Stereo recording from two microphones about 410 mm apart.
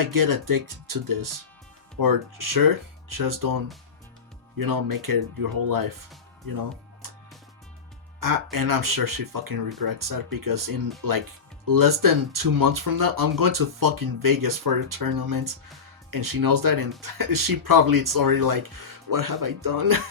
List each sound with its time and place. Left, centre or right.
0.0 s speech: right
8.2 s speech: right